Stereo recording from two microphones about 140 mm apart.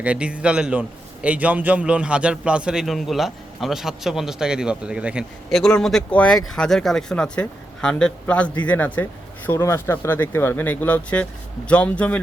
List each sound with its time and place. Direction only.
0.0 s a man's voice: 10° right (ahead or behind)
5.5 s speech: 5° left (ahead or behind)